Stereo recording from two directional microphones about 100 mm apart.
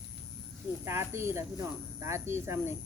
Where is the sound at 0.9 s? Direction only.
25° right (ahead or behind).